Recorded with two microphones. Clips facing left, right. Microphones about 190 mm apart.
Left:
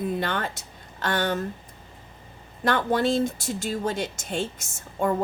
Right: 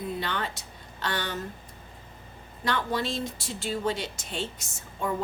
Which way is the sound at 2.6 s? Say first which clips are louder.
Left 6 dB; 50° left (ahead or behind).